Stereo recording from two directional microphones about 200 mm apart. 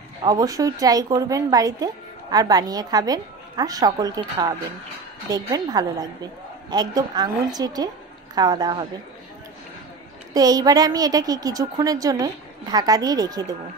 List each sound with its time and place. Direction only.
0.2 s a woman's voice: 20° right (ahead or behind)
10.3 s a woman's voice: 20° right (ahead or behind)